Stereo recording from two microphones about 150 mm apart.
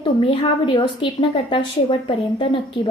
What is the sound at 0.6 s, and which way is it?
A woman's voice, 35° left (ahead or behind).